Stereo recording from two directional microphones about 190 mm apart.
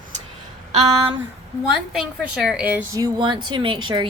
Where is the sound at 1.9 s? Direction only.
5° right (ahead or behind).